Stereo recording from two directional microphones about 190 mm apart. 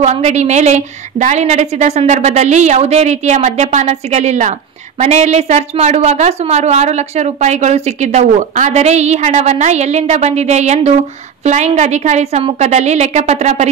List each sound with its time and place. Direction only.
0.0 s a woman's voice: 35° right (ahead or behind)